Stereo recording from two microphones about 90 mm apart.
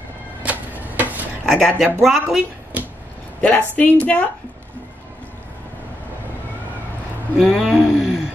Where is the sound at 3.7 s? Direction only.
15° left (ahead or behind).